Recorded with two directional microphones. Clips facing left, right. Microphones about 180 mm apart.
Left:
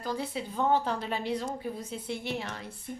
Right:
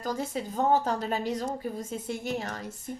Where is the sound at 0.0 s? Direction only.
45° right (ahead or behind).